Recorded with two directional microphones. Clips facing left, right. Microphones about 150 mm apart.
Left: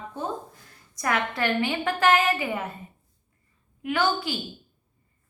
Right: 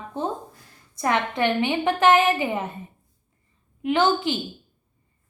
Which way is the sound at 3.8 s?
25° right (ahead or behind).